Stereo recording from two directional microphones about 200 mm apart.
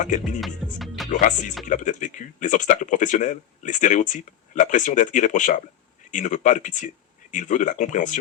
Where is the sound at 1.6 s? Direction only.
40° left (ahead or behind).